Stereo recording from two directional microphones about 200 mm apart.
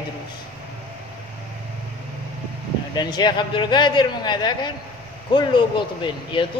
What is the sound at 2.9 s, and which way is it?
Speech, 20° left (ahead or behind).